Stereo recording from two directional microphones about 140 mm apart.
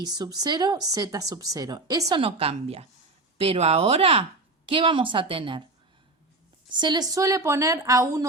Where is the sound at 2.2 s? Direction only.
45° right (ahead or behind).